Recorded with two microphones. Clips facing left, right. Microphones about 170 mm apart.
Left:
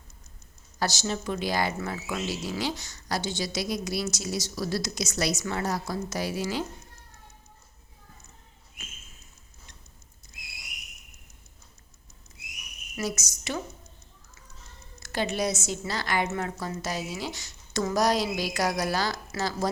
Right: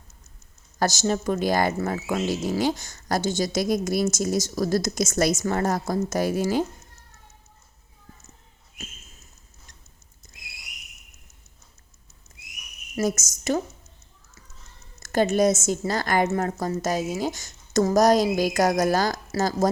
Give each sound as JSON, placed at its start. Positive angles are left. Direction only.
{"t": 0.8, "sound": "speech", "side_deg": -45}
{"t": 13.0, "sound": "speech", "side_deg": -45}
{"t": 15.0, "sound": "speech", "side_deg": -45}